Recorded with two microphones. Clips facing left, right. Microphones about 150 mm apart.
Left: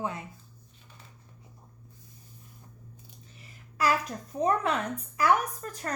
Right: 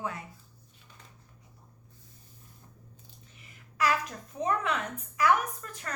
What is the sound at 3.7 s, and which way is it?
A woman's voice, 35° left (ahead or behind).